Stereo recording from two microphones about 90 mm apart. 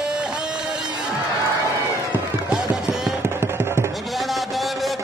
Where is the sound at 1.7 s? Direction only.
40° left (ahead or behind).